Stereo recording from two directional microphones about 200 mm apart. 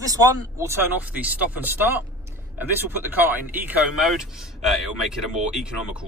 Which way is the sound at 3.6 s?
5° right (ahead or behind).